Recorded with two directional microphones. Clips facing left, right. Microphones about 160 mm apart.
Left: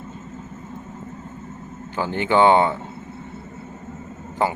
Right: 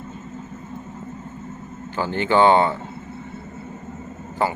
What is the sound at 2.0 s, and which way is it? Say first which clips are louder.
Speech: even; 15° left (ahead or behind).